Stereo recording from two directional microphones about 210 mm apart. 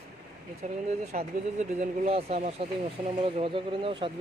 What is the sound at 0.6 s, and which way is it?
Speech, 35° right (ahead or behind).